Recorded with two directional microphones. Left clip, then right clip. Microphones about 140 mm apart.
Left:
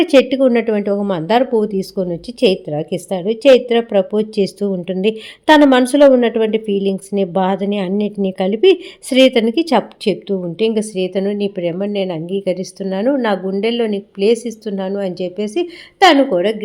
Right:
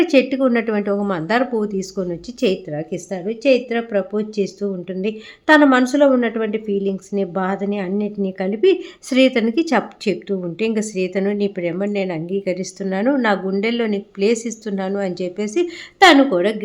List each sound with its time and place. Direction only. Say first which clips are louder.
0.0 s a woman's voice: left 4 dB; 30° left (ahead or behind); by 16.6 s 5° left (ahead or behind)